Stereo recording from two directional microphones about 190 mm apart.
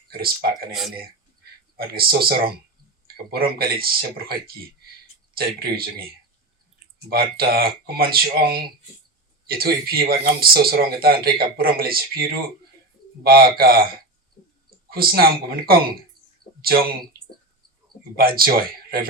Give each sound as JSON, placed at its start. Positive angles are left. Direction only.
{"t": 0.1, "sound": "speech", "side_deg": -50}
{"t": 0.7, "sound": "speech", "side_deg": 0}
{"t": 1.7, "sound": "speech", "side_deg": -50}
{"t": 7.1, "sound": "speech", "side_deg": -55}
{"t": 14.8, "sound": "speech", "side_deg": -50}
{"t": 18.2, "sound": "speech", "side_deg": -50}